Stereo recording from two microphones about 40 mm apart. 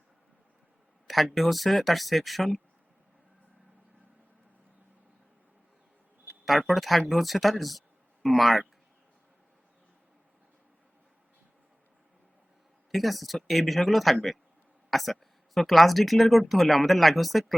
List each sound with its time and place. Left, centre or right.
1.0 s speech: centre
6.4 s speech: centre
12.9 s speech: centre